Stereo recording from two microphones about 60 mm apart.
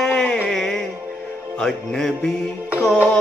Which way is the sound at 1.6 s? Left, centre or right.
Centre.